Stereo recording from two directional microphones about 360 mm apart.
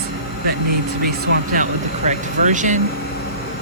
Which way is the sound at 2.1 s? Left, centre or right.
Right.